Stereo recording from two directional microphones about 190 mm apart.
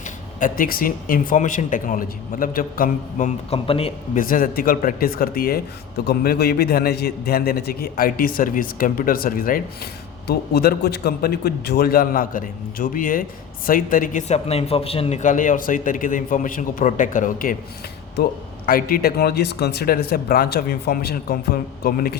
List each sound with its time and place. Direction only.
0.3 s speech: 45° left (ahead or behind)
4.2 s speech: 45° left (ahead or behind)